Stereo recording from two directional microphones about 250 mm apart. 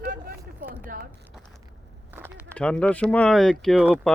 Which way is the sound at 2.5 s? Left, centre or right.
Centre.